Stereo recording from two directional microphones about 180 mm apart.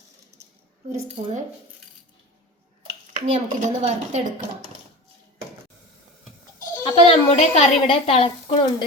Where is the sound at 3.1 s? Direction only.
45° right (ahead or behind).